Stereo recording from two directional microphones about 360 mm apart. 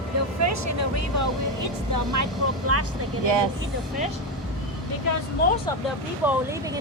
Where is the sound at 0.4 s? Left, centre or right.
Right.